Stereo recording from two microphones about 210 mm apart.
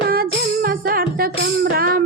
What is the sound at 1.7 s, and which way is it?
Music, 45° right (ahead or behind).